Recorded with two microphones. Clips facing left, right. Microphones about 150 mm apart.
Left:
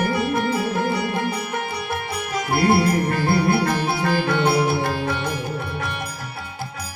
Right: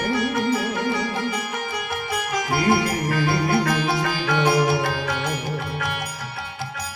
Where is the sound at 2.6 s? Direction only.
60° left (ahead or behind).